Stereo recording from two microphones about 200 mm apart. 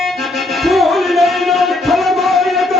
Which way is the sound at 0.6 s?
Centre (ahead or behind).